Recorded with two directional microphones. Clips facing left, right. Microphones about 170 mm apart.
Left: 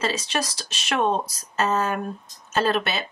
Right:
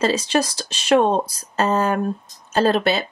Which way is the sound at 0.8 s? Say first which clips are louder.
Right 7 dB; 35° right (ahead or behind).